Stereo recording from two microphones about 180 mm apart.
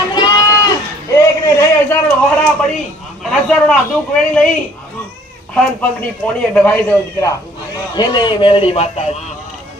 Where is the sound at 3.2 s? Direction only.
5° left (ahead or behind).